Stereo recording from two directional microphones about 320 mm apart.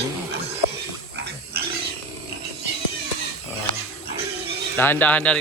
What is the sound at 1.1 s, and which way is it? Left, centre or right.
Pig, right.